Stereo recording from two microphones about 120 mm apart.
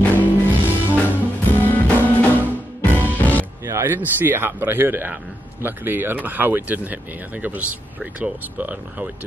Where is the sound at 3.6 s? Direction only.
20° right (ahead or behind).